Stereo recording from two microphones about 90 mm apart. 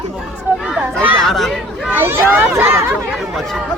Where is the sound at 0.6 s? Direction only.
5° right (ahead or behind).